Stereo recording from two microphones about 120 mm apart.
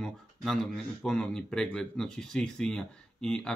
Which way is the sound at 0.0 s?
5° left (ahead or behind).